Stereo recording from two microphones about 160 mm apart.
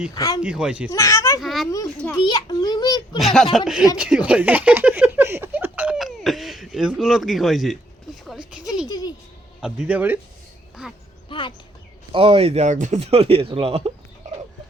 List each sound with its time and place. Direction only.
0.1 s speech: 25° left (ahead or behind)
0.4 s speech: 5° right (ahead or behind)
0.9 s a child's voice: 20° left (ahead or behind)
1.4 s children playing: centre (ahead or behind)
2.2 s a child's voice: 25° left (ahead or behind)
3.2 s speech: centre (ahead or behind)
3.9 s a sound: 5° right (ahead or behind)
8.9 s music: 25° left (ahead or behind)
9.6 s speech: 5° right (ahead or behind)
10.8 s a sound: 5° right (ahead or behind)
11.3 s a sound: 30° left (ahead or behind)
12.1 s speech: 35° right (ahead or behind)